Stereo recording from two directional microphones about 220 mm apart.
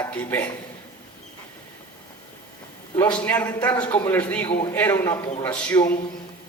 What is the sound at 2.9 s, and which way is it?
Speech, 10° left (ahead or behind).